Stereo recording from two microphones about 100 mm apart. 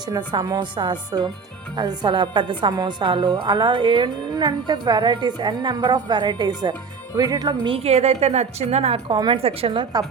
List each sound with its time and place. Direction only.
0.1 s speech: 50° right (ahead or behind)
7.7 s a woman's voice: 85° right
9.0 s speech: 50° right (ahead or behind)
9.4 s a woman's voice: 70° right (ahead or behind)